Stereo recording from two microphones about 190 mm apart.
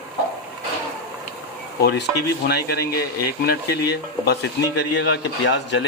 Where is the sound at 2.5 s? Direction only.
60° left (ahead or behind).